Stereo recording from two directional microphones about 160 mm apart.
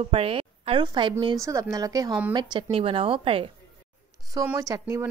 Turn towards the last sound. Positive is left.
turn(degrees=-20)  # may be behind; listen again after turning